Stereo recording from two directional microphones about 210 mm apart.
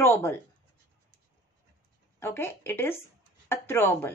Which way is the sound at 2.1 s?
10° left (ahead or behind).